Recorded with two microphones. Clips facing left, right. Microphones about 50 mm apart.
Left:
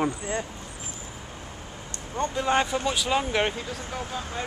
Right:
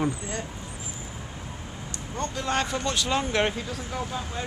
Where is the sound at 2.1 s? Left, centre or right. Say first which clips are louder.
Left 4 dB; centre.